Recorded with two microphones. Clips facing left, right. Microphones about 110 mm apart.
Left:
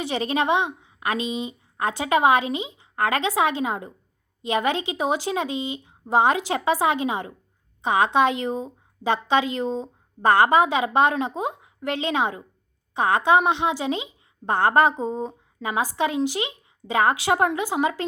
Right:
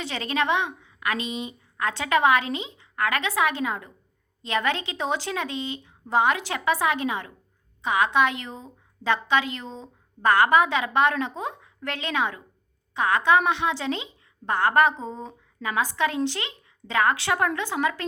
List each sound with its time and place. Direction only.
0.0 s speech: 20° left (ahead or behind)